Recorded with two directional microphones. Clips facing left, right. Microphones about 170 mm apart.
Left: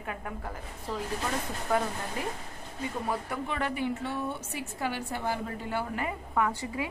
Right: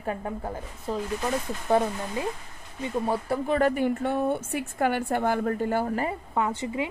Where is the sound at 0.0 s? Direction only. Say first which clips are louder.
Right 6 dB; 30° right (ahead or behind).